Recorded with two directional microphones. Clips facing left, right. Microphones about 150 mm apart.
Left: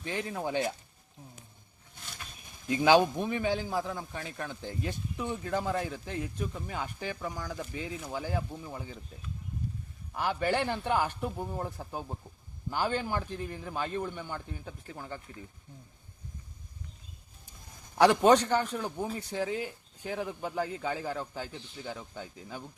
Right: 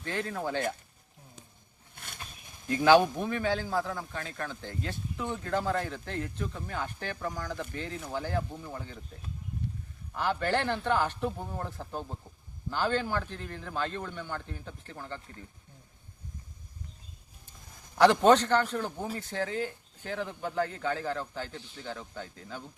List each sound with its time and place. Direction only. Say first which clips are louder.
0.0 s a man's voice: right 1 dB; 15° left (ahead or behind)
2.6 s a man's voice: right 1 dB; 15° left (ahead or behind)
10.2 s a man's voice: even; 15° left (ahead or behind)
17.9 s a man's voice: right 1 dB; 10° left (ahead or behind)